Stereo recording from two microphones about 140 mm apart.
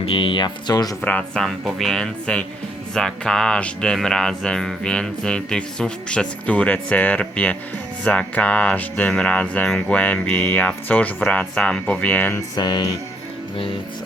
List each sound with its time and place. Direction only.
0.0 s speech: 40° left (ahead or behind)
1.0 s speech: 10° left (ahead or behind)
12.5 s music: 30° left (ahead or behind)